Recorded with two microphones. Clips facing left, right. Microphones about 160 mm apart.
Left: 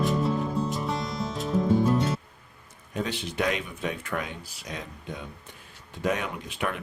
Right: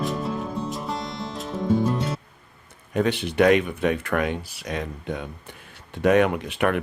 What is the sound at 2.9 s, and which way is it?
Speech, 60° right (ahead or behind).